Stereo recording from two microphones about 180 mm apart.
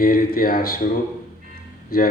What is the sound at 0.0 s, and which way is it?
Speech, 55° left (ahead or behind).